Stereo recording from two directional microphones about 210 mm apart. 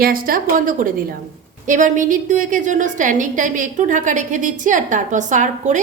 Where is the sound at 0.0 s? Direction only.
45° right (ahead or behind).